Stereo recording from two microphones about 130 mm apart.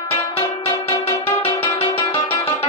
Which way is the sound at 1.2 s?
15° left (ahead or behind).